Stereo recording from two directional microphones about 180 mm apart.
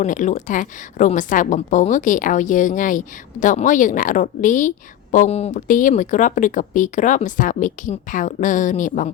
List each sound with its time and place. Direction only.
0.0 s a woman's voice: 45° left (ahead or behind)